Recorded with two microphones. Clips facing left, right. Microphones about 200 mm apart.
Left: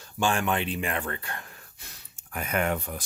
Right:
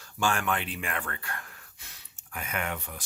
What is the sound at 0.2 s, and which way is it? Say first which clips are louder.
Speech: left 3 dB; 20° left (ahead or behind).